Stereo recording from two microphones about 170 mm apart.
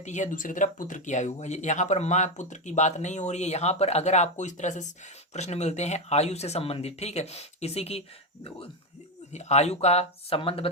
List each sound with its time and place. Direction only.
0.0 s speech: 45° left (ahead or behind)